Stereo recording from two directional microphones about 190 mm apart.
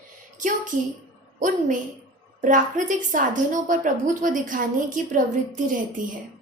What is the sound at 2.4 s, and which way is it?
A woman's voice, 45° right (ahead or behind).